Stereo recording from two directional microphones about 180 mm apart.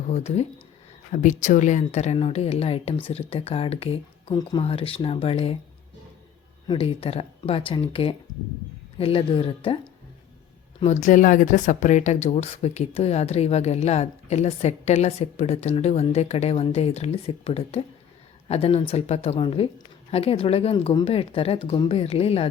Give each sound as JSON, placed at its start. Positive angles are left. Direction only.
{"t": 0.1, "sound": "speech", "side_deg": 35}
{"t": 6.7, "sound": "speech", "side_deg": 30}
{"t": 10.8, "sound": "speech", "side_deg": 40}